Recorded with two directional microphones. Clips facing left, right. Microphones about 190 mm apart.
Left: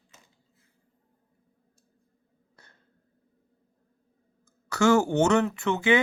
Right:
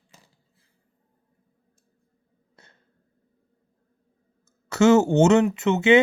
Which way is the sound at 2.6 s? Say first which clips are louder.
Right 3 dB; 25° right (ahead or behind).